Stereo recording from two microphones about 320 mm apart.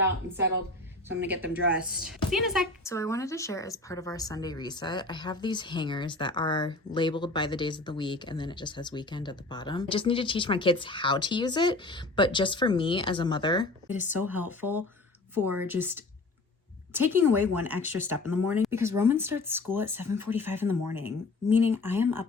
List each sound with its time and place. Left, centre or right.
1.1 s speech: right
2.3 s a woman's voice: centre
13.8 s speech: centre